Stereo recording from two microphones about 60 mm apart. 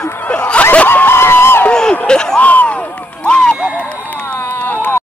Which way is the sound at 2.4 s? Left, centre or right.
Left.